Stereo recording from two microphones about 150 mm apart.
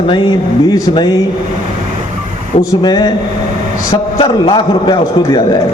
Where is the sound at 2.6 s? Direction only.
30° left (ahead or behind).